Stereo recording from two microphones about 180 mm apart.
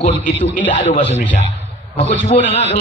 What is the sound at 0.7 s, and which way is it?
Speech, 40° left (ahead or behind).